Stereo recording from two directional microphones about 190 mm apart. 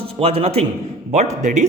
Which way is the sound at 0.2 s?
30° right (ahead or behind).